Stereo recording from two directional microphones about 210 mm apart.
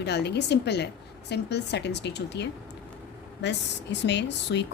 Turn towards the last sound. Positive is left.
turn(degrees=55)  # may be behind; listen again after turning